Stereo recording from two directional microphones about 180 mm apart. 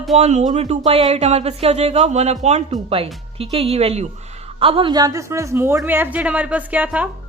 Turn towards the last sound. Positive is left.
turn(degrees=-10)  # may be behind; listen again after turning